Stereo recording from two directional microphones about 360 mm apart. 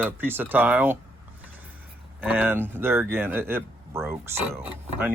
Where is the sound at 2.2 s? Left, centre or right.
Centre.